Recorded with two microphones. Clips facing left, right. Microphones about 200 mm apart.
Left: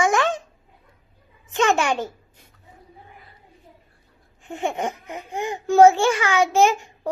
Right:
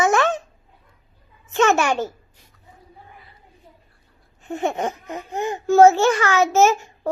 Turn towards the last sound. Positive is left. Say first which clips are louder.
# right 1 dB
turn(degrees=15)  # may be behind; listen again after turning